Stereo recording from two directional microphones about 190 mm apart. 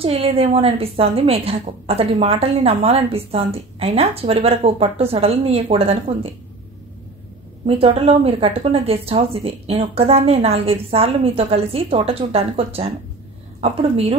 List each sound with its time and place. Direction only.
0.0 s a woman's voice: 30° right (ahead or behind)
7.6 s a woman's voice: 30° right (ahead or behind)